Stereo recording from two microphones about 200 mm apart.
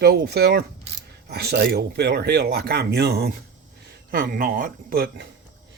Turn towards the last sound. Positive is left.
turn(degrees=-55)  # may be behind; listen again after turning